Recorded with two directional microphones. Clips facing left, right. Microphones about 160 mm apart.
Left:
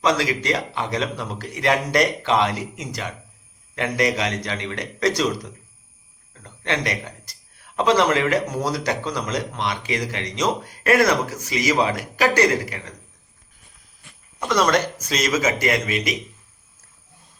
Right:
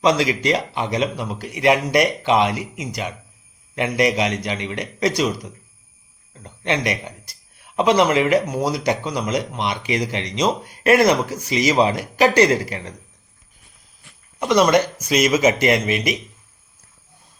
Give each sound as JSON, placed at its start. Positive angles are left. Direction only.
{"t": 0.0, "sound": "speech", "side_deg": -20}
{"t": 14.3, "sound": "speech", "side_deg": -15}